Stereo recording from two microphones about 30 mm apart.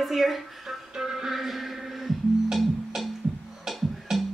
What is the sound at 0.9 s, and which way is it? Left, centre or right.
Music, centre.